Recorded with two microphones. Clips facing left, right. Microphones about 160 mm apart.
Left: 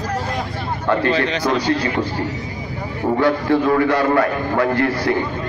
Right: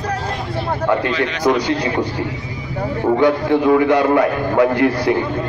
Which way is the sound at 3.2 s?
15° right (ahead or behind).